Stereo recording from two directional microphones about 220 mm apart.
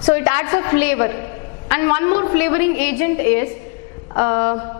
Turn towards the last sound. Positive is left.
turn(degrees=15)  # may be behind; listen again after turning